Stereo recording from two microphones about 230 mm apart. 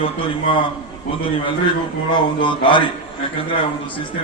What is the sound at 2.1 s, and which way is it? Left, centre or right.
Speech, left.